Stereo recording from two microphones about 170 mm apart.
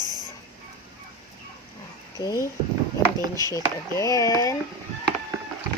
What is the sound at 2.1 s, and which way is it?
Speech, 20° left (ahead or behind).